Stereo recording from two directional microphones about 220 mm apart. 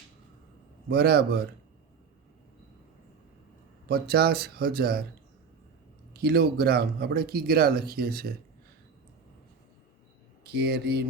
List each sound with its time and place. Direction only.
0.9 s speech: 45° right (ahead or behind)
3.8 s speech: 45° right (ahead or behind)
6.1 s speech: 45° right (ahead or behind)
10.4 s speech: 50° right (ahead or behind)